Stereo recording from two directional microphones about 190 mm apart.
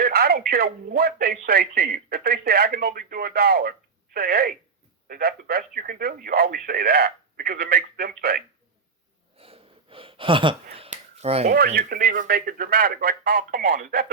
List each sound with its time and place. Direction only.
0.0 s speech: 55° right (ahead or behind)
9.4 s gasp: 30° right (ahead or behind)
11.4 s speech: 50° right (ahead or behind)